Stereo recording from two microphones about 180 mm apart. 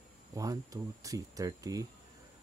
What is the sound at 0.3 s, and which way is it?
Speech, 20° right (ahead or behind).